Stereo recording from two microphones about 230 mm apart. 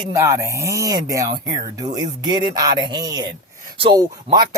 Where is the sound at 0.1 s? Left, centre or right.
Centre.